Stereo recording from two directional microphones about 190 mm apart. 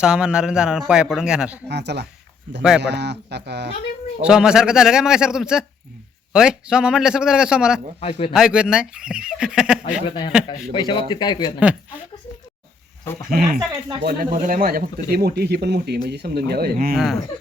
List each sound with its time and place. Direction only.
0.0 s speech: 5° right (ahead or behind)
1.6 s speech: 60° right (ahead or behind)
2.6 s speech: 5° right (ahead or behind)
2.8 s speech: 65° right (ahead or behind)
4.2 s speech: 5° right (ahead or behind)
10.1 s speech: 30° left (ahead or behind)
13.3 s speech: 50° right (ahead or behind)